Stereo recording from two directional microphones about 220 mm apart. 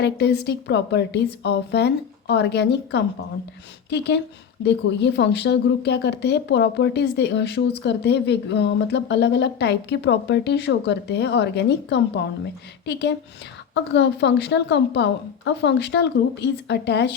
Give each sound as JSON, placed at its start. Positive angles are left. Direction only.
{"t": 0.0, "sound": "speech", "side_deg": 50}